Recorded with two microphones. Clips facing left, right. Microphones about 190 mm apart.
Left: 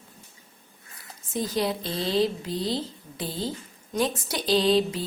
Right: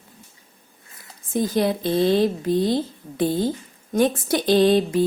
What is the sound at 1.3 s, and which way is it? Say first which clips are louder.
A woman's voice: right 6 dB; 55° right (ahead or behind).